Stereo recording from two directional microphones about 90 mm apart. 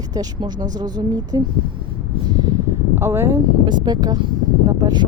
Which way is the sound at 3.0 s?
30° right (ahead or behind).